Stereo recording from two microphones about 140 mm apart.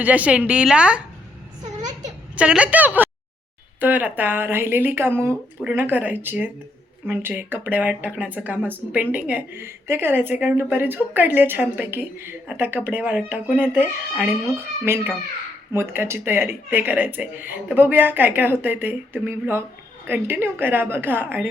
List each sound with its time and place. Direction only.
0.0 s speech: 10° right (ahead or behind)
1.6 s a sound: 60° right (ahead or behind)
2.3 s speech: 10° right (ahead or behind)